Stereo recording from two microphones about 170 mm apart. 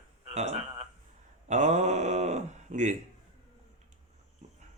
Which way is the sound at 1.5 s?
45° right (ahead or behind).